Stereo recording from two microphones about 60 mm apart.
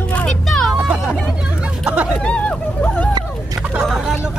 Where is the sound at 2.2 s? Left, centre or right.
Centre.